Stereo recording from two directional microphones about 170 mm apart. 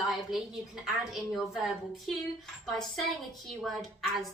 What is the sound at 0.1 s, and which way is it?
A woman's voice, centre (ahead or behind).